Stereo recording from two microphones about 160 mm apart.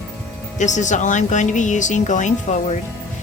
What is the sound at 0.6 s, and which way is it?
A woman's voice, 50° left (ahead or behind).